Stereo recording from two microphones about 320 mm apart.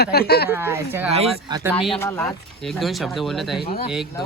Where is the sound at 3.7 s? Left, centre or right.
Centre.